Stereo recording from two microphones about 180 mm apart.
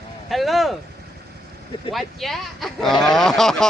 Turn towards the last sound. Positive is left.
turn(degrees=5)  # may be behind; listen again after turning